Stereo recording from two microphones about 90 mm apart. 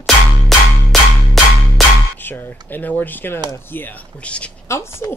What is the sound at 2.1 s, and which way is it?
Speech, 25° left (ahead or behind).